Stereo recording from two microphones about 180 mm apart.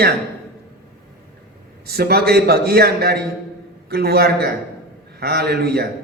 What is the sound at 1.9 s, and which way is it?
A man's voice, 60° right (ahead or behind).